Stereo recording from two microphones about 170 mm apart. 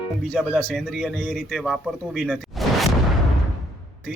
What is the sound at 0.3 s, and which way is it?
Speech, centre (ahead or behind).